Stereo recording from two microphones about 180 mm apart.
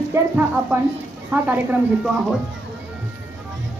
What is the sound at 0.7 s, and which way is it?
Speech, 10° right (ahead or behind).